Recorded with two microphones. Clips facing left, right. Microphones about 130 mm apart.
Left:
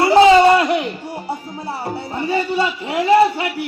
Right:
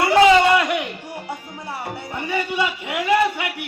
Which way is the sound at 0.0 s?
30° left (ahead or behind).